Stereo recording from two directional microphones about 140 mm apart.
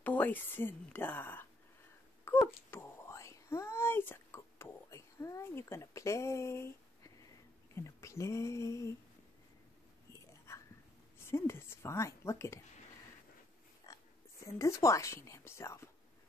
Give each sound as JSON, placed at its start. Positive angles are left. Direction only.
{"t": 0.0, "sound": "a woman's voice", "side_deg": 15}
{"t": 2.4, "sound": "whispering", "side_deg": 20}
{"t": 7.7, "sound": "speech", "side_deg": 20}
{"t": 10.1, "sound": "whispering", "side_deg": 20}
{"t": 11.1, "sound": "a woman's voice", "side_deg": 20}
{"t": 13.9, "sound": "a sound", "side_deg": 25}
{"t": 14.4, "sound": "speech", "side_deg": 20}